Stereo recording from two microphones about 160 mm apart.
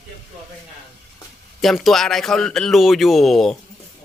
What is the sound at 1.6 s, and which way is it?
Speech, centre (ahead or behind).